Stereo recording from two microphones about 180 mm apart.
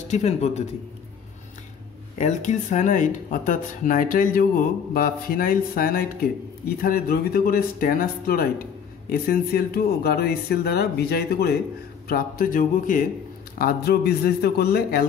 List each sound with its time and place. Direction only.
0.1 s a man's voice: 40° left (ahead or behind)
2.1 s speech: 40° left (ahead or behind); by 15.0 s 60° left (ahead or behind)